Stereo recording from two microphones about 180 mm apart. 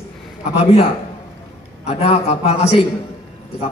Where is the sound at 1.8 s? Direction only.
35° left (ahead or behind).